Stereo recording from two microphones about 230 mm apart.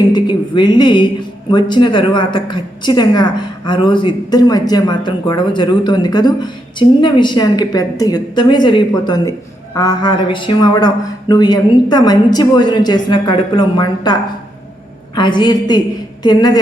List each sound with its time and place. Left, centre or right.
0.1 s a woman's voice: centre